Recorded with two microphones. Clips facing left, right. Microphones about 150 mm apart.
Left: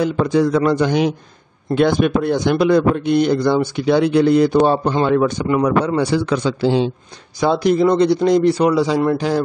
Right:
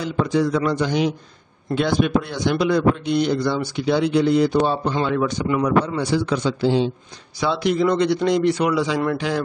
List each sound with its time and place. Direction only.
0.0 s a man's voice: 55° left (ahead or behind)
5.9 s a man's voice: 70° left (ahead or behind)
7.3 s a man's voice: 45° left (ahead or behind)